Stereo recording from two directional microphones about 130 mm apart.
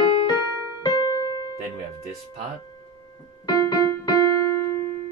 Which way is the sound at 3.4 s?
30° left (ahead or behind).